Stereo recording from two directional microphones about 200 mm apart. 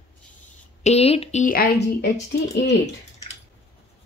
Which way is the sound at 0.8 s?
30° left (ahead or behind).